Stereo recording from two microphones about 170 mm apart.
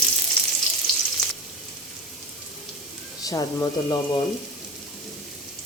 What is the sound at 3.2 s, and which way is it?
Speech, 20° left (ahead or behind).